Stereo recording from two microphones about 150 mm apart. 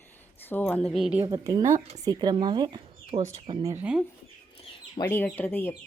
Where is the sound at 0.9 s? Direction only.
5° right (ahead or behind).